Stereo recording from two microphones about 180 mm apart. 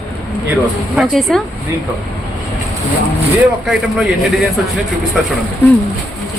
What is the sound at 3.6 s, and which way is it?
Speech, 5° right (ahead or behind).